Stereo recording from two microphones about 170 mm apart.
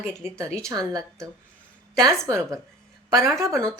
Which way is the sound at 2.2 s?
20° right (ahead or behind).